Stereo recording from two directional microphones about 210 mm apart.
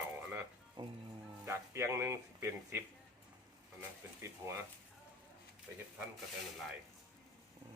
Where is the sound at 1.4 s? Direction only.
10° right (ahead or behind).